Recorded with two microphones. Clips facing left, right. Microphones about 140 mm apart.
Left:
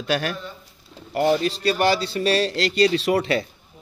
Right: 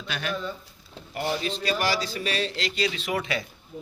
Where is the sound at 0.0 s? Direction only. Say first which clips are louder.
Left 6 dB; 45° left (ahead or behind).